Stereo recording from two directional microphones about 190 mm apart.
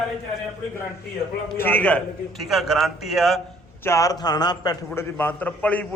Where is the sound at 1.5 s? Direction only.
10° left (ahead or behind).